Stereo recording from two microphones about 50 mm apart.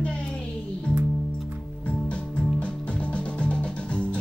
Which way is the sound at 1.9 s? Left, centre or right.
Left.